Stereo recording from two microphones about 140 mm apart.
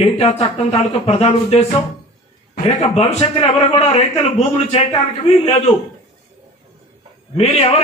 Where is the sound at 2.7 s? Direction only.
45° left (ahead or behind).